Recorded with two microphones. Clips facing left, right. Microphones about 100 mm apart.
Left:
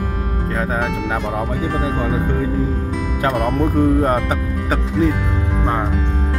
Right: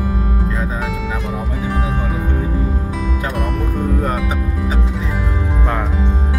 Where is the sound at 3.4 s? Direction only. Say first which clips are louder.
Left 5 dB; 35° left (ahead or behind).